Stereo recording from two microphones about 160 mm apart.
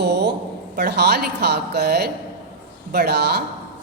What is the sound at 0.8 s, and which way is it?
A woman's voice, 90° right.